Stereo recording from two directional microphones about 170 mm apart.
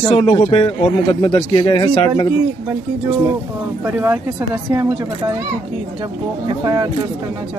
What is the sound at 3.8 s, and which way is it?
Speech, 15° right (ahead or behind).